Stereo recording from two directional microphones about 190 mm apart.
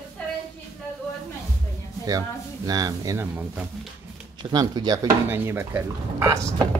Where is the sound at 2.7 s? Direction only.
20° right (ahead or behind).